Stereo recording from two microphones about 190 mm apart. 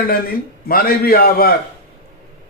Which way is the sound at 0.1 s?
50° left (ahead or behind).